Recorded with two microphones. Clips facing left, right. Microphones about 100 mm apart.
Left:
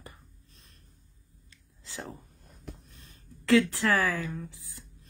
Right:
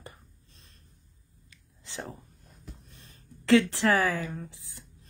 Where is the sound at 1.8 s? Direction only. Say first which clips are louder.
Right 2 dB; 25° right (ahead or behind).